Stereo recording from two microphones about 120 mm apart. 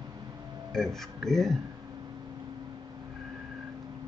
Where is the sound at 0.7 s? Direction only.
5° left (ahead or behind).